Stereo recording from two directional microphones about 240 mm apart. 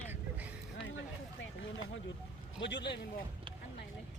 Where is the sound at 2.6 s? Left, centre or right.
Left.